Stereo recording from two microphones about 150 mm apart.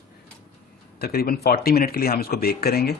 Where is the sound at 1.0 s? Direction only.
90° left.